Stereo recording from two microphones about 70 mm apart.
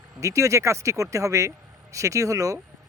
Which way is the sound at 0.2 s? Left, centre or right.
Right.